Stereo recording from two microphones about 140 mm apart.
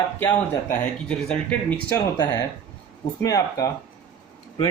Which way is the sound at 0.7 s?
10° left (ahead or behind).